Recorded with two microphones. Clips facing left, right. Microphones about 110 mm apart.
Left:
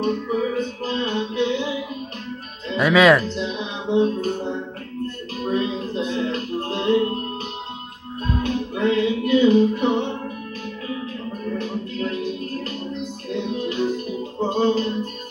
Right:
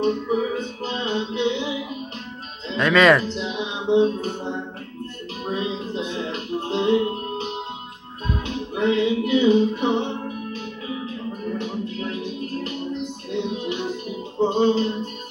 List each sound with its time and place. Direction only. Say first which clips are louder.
0.0 s music: right 1 dB; 20° right (ahead or behind)
2.8 s speech: left 1 dB; 5° left (ahead or behind)
3.2 s music: left 1 dB; 20° right (ahead or behind)